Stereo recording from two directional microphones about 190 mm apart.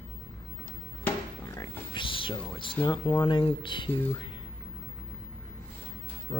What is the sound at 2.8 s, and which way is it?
Speech, 25° left (ahead or behind).